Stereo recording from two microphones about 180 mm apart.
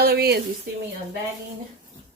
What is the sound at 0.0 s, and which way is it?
Speech, 60° right (ahead or behind).